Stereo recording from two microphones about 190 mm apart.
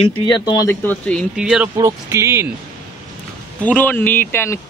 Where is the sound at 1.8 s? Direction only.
15° right (ahead or behind).